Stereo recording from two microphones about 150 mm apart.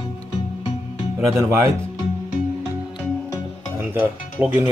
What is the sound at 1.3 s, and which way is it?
Speech, 20° right (ahead or behind).